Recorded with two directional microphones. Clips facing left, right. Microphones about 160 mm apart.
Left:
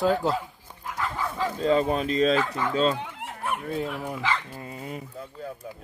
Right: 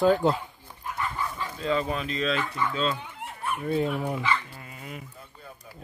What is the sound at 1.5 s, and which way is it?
Speech, 35° left (ahead or behind).